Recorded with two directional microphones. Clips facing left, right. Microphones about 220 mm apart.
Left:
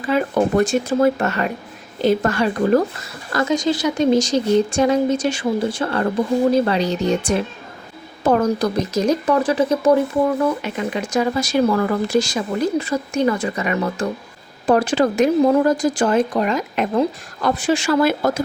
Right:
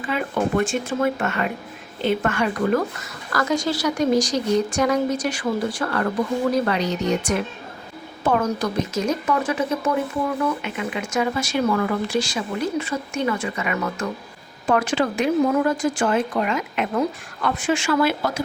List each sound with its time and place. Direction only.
0.1 s speech: 40° left (ahead or behind)
3.3 s speech: 20° left (ahead or behind); by 18.4 s 45° left (ahead or behind)